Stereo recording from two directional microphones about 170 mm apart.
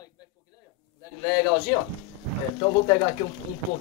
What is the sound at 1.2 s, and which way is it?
Speech, 20° left (ahead or behind).